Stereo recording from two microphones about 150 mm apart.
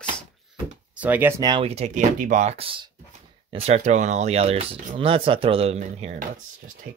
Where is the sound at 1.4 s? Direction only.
30° right (ahead or behind).